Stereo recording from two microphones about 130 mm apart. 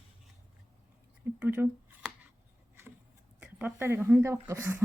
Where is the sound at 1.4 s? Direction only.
15° right (ahead or behind).